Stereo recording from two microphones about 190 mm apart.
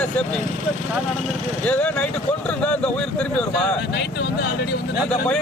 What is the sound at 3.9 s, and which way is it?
Speech, 60° left (ahead or behind).